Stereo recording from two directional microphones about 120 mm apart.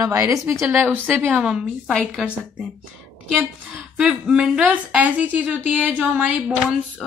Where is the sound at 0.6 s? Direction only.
15° right (ahead or behind).